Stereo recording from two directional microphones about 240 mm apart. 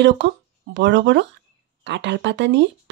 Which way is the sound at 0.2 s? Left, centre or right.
Right.